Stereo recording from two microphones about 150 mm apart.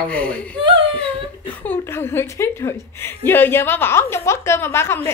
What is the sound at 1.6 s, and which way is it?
A woman's voice, 15° left (ahead or behind).